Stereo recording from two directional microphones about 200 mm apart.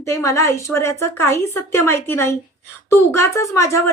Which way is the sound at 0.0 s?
15° left (ahead or behind).